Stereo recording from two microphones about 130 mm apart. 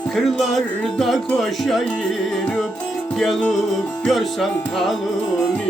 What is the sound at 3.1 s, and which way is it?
Music, centre (ahead or behind).